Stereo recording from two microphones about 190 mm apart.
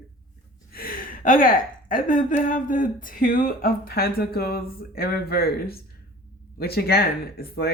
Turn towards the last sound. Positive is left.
turn(degrees=55)  # may be behind; listen again after turning